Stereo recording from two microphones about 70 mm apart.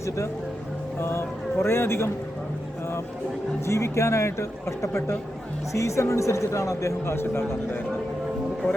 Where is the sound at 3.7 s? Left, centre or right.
Left.